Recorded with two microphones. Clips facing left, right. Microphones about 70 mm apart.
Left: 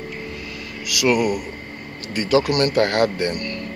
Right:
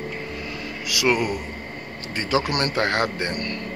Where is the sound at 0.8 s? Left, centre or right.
Right.